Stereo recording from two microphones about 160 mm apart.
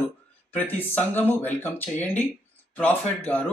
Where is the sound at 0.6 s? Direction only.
10° left (ahead or behind).